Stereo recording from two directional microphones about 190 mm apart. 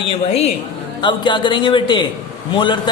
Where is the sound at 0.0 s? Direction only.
30° left (ahead or behind).